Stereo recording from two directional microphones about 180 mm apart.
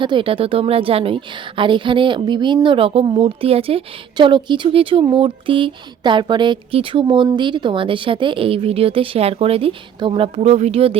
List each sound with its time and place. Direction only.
0.0 s a woman's voice: 30° right (ahead or behind)